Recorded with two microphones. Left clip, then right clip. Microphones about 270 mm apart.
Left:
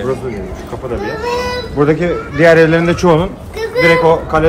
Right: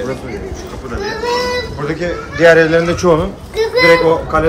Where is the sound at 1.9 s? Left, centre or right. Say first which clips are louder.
Left 5 dB; left.